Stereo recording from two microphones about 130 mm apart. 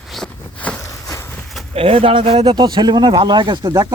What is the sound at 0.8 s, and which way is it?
Walk, 25° left (ahead or behind).